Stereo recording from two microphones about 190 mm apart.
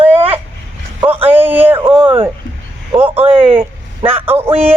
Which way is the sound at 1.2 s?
10° right (ahead or behind).